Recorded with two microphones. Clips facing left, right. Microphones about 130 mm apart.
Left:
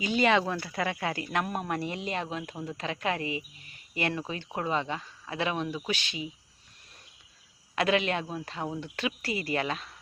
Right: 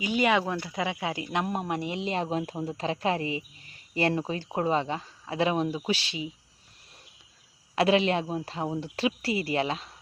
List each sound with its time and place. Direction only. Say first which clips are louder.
0.0 s speech: even; 10° right (ahead or behind); by 6.2 s 30° right (ahead or behind)
7.8 s speech: right 4 dB; 30° right (ahead or behind)